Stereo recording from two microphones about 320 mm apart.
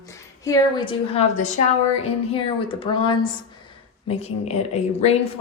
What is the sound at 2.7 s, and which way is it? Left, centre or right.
A woman's voice, centre.